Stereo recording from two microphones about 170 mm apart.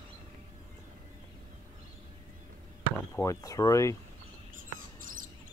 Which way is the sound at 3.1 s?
20° left (ahead or behind).